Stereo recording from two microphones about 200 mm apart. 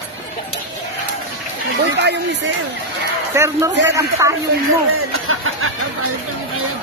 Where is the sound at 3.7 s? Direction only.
65° right (ahead or behind).